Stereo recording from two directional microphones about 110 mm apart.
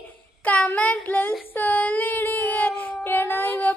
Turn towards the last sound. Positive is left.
turn(degrees=20)  # may be behind; listen again after turning